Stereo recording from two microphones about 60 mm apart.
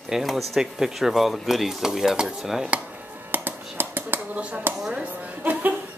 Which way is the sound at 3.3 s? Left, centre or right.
Right.